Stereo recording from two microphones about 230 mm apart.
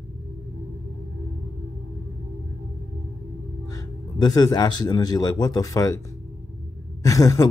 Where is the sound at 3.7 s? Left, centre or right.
Centre.